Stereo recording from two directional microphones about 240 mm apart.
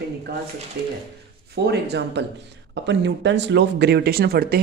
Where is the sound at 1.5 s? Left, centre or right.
Right.